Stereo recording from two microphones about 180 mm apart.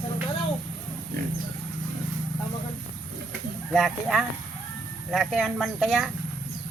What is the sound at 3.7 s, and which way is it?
Speech, centre (ahead or behind).